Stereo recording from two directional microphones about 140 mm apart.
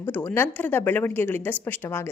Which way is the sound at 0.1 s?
15° left (ahead or behind).